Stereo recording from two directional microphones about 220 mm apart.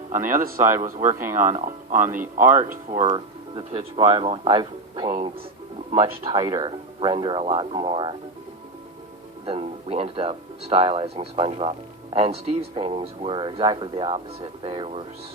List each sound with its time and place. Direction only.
0.1 s speech: 40° right (ahead or behind); by 8.1 s 20° right (ahead or behind)
9.5 s speech: 25° right (ahead or behind)